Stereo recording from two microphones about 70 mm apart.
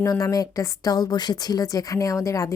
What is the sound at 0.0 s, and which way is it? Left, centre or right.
A woman's voice, left.